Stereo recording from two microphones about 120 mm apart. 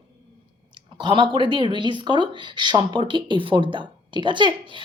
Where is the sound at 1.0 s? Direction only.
40° right (ahead or behind).